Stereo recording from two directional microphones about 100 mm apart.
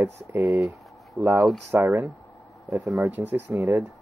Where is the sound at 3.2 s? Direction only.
20° right (ahead or behind).